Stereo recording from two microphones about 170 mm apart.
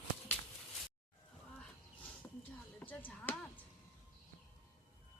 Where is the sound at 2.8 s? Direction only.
10° left (ahead or behind).